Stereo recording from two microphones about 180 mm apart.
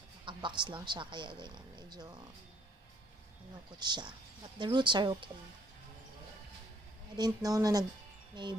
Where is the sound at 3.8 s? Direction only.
25° right (ahead or behind).